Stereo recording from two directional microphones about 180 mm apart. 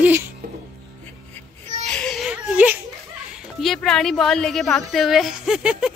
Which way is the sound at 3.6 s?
Centre (ahead or behind).